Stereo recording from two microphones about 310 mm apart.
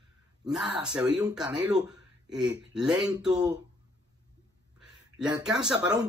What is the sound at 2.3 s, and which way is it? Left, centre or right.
Speech, centre.